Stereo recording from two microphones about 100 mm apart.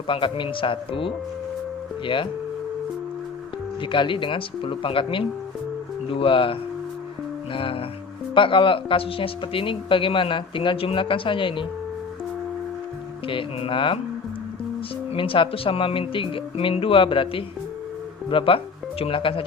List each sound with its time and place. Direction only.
0.1 s speech: 60° left (ahead or behind)
3.9 s speech: 55° left (ahead or behind)
13.2 s speech: 60° left (ahead or behind)
15.1 s speech: 60° left (ahead or behind)